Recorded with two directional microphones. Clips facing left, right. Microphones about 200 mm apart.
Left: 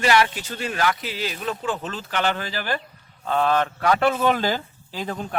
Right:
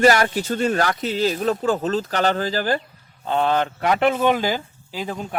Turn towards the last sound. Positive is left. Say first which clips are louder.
# right 1 dB
turn(degrees=-10)  # may be behind; listen again after turning